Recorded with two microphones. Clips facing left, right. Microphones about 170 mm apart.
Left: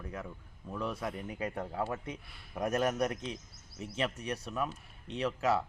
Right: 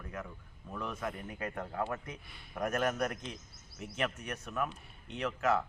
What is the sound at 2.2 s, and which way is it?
Speech, centre (ahead or behind).